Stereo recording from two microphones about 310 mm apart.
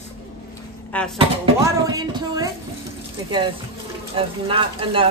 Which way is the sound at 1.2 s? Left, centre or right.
Centre.